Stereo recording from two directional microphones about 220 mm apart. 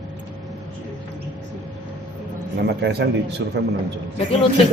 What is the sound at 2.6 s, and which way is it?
A man's voice, 50° right (ahead or behind).